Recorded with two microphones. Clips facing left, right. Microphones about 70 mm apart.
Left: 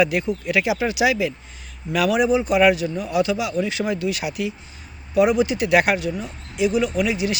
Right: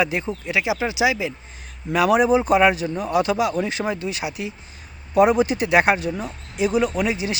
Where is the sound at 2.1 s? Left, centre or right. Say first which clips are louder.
Right 2 dB; right.